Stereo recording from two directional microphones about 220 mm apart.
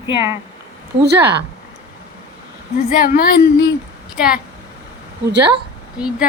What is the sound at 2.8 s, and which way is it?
Female singing, 40° left (ahead or behind).